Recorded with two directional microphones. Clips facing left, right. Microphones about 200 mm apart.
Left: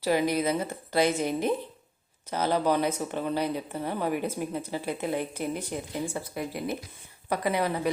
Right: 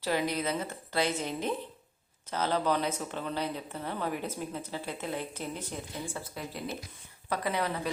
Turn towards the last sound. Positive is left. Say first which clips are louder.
# left 5 dB
turn(degrees=10)  # may be behind; listen again after turning